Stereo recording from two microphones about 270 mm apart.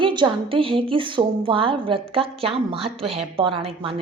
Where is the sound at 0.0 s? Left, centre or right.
Centre.